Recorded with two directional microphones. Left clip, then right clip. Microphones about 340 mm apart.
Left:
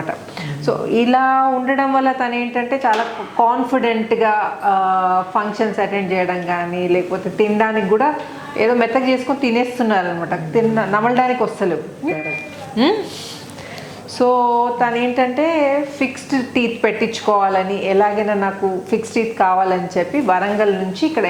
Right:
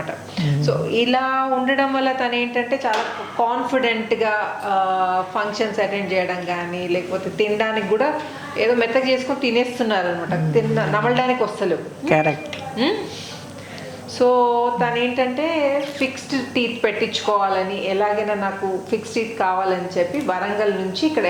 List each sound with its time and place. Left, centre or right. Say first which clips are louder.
0.3 s a woman's voice: even; left
8.5 s a woman's voice: left 2 dB; left
12.7 s speech: left 5 dB; left
14.2 s a woman's voice: left 2 dB; left
21.0 s a woman's voice: left 2 dB; left